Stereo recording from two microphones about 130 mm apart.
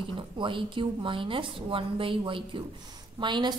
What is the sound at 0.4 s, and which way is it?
A woman's voice, 40° right (ahead or behind).